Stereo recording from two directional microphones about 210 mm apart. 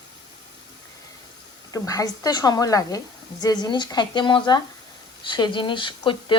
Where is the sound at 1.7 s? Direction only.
15° left (ahead or behind).